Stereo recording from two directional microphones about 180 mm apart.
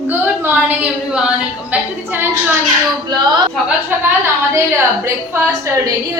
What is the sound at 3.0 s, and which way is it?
Music, 25° right (ahead or behind).